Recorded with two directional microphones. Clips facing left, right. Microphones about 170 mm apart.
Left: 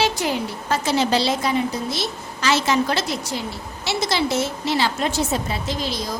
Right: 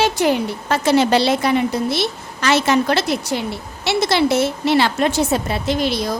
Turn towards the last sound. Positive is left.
turn(degrees=-65)  # may be behind; listen again after turning